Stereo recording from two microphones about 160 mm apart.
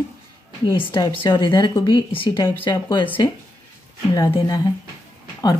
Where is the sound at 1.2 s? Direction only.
30° left (ahead or behind).